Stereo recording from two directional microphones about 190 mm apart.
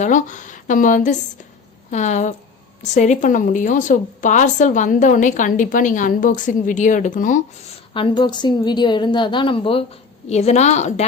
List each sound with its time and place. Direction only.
0.0 s a woman's voice: 40° left (ahead or behind)
7.9 s a woman's voice: 25° left (ahead or behind)